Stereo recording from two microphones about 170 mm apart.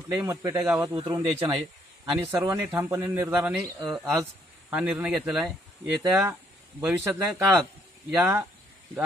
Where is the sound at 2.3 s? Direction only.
15° right (ahead or behind).